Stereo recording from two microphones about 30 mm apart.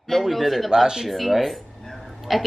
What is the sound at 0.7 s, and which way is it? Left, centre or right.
Speech, centre.